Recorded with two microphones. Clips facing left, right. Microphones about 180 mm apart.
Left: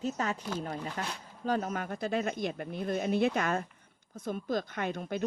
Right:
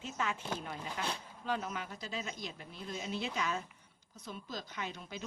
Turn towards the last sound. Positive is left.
turn(degrees=55)  # may be behind; listen again after turning